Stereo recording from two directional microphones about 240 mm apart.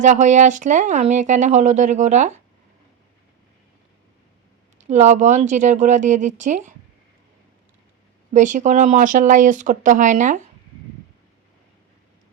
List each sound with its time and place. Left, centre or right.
0.0 s speech: right
4.8 s speech: right
8.3 s speech: right